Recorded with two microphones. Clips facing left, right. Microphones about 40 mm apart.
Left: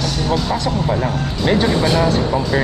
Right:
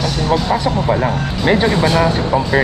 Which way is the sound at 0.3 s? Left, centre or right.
Centre.